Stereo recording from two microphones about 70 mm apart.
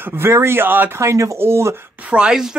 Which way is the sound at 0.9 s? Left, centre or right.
Right.